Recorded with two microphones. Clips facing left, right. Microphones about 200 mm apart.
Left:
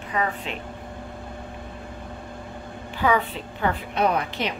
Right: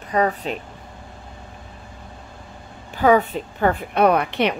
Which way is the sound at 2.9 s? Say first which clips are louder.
Right 6 dB; 45° right (ahead or behind).